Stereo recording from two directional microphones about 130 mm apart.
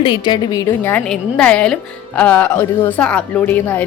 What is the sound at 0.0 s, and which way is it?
Speech, 35° left (ahead or behind).